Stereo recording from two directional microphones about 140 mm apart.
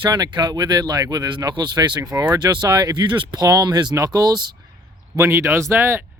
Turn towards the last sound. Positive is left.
turn(degrees=-20)  # may be behind; listen again after turning